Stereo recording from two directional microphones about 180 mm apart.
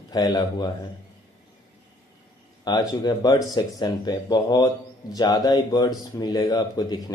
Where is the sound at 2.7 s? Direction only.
25° left (ahead or behind).